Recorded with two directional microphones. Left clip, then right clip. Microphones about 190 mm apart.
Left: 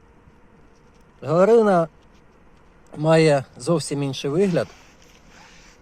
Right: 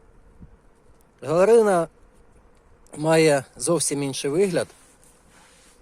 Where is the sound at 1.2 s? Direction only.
30° right (ahead or behind).